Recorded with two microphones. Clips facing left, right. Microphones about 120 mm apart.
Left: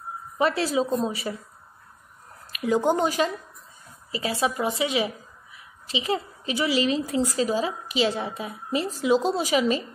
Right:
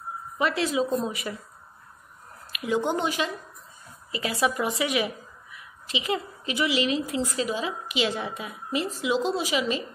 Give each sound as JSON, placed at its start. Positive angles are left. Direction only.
{"t": 0.4, "sound": "a woman's voice", "side_deg": 35}
{"t": 2.5, "sound": "a woman's voice", "side_deg": 40}
{"t": 4.1, "sound": "a woman's voice", "side_deg": 30}